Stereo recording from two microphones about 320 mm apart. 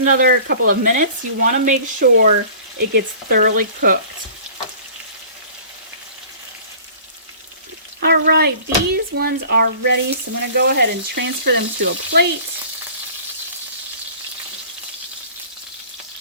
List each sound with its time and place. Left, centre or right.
0.0 s frying: right
8.0 s speech: right